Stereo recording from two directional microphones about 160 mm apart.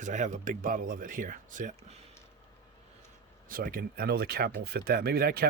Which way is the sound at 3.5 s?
60° right (ahead or behind).